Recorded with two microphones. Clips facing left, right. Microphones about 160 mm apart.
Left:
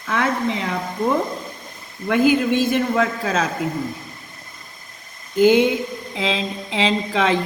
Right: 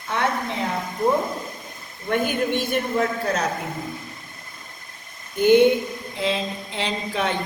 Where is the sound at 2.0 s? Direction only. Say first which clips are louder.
Left 6 dB; 90° left.